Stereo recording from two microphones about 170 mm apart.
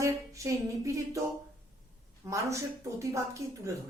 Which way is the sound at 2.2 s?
15° right (ahead or behind).